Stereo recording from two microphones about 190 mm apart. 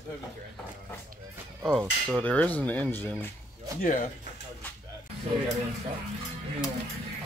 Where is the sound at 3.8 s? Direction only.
45° left (ahead or behind).